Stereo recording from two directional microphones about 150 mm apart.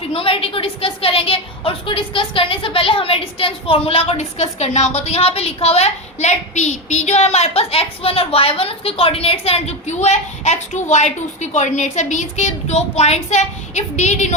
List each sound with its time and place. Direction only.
0.0 s a woman's voice: 40° left (ahead or behind)